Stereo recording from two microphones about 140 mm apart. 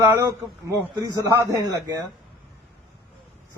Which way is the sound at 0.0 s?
20° right (ahead or behind).